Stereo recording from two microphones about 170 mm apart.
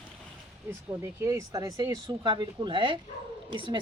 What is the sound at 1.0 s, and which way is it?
Speech, 15° right (ahead or behind).